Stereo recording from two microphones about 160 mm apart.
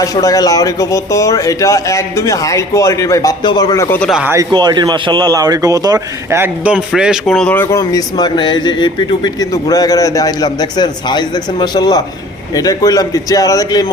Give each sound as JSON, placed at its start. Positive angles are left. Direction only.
{"t": 0.0, "sound": "a man's voice", "side_deg": 20}
{"t": 4.1, "sound": "speech", "side_deg": -10}
{"t": 4.4, "sound": "speech", "side_deg": -25}
{"t": 6.7, "sound": "a man's voice", "side_deg": -5}